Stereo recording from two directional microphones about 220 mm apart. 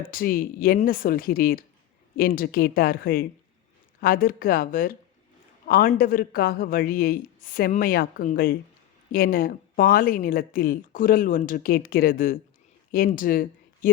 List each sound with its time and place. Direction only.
0.1 s speech: 40° left (ahead or behind)